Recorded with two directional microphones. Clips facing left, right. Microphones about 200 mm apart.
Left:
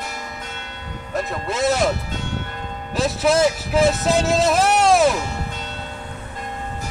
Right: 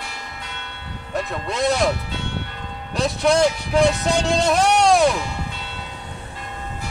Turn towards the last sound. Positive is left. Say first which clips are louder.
# even
turn(degrees=0)  # may be behind; listen again after turning